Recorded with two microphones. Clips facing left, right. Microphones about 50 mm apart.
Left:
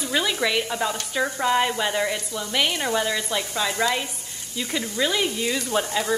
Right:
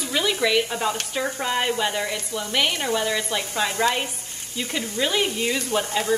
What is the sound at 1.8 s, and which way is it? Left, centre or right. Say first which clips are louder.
Speech: left 1 dB; centre.